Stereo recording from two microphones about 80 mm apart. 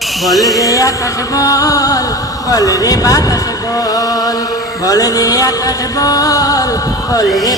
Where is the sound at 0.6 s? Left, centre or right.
Left.